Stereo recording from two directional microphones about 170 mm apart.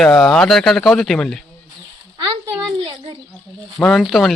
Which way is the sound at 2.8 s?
30° right (ahead or behind).